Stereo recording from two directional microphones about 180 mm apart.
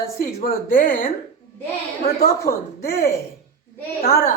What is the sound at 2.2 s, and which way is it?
Speech, 55° left (ahead or behind).